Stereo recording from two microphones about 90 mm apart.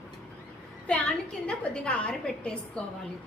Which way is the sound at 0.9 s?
10° left (ahead or behind).